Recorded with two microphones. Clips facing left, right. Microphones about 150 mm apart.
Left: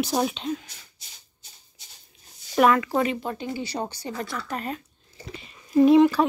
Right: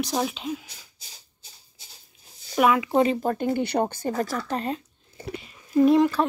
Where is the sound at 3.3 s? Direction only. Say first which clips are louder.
Right 7 dB; 50° right (ahead or behind).